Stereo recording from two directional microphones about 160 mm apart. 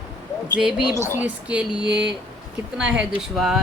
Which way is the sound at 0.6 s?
5° right (ahead or behind).